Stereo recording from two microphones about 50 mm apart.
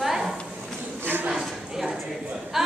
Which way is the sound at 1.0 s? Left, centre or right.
Right.